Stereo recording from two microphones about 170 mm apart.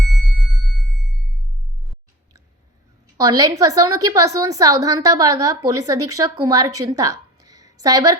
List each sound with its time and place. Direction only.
3.2 s a woman's voice: 20° right (ahead or behind)